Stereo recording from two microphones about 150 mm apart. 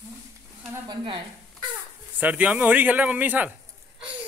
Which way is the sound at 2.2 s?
10° right (ahead or behind).